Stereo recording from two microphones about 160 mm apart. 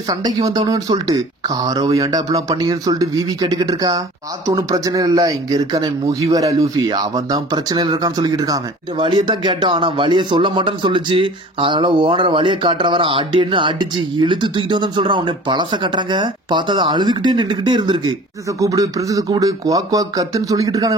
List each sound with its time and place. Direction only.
0.1 s speech: 25° right (ahead or behind)